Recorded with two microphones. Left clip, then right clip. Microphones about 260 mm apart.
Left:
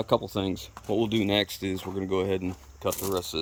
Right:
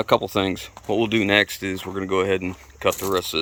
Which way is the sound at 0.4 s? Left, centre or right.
Centre.